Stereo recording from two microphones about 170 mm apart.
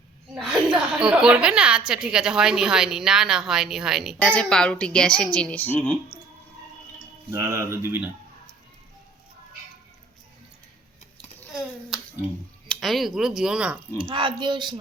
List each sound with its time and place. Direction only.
0.3 s a woman's voice: 5° right (ahead or behind)
4.2 s a woman's voice: 5° left (ahead or behind)
7.3 s speech: 15° right (ahead or behind)
11.9 s finger snapping: 5° right (ahead or behind)
12.6 s a woman's voice: 5° left (ahead or behind)
14.0 s a woman's voice: 30° right (ahead or behind)